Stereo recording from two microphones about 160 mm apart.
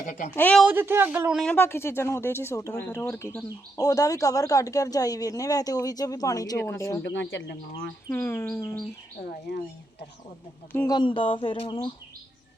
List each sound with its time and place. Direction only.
0.0 s speech: 60° left (ahead or behind)
0.3 s speech: 10° left (ahead or behind)
0.6 s speech: 15° right (ahead or behind)
1.4 s speech: 10° left (ahead or behind)
7.0 s speech: 90° left
8.1 s speech: 15° left (ahead or behind)
9.3 s speech: 80° left
10.8 s a sound: 30° left (ahead or behind)